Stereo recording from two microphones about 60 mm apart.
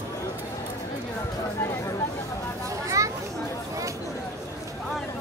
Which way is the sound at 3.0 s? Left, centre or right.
Right.